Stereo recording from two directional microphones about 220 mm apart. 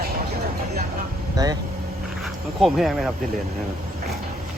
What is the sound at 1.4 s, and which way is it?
Speech, 15° right (ahead or behind).